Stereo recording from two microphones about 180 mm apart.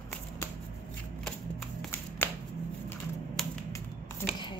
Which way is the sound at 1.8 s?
10° left (ahead or behind).